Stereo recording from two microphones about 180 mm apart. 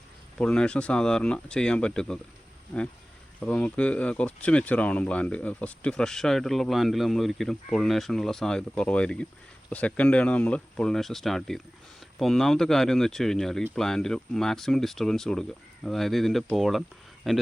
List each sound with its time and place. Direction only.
0.3 s speech: 5° left (ahead or behind)
3.4 s speech: 5° left (ahead or behind)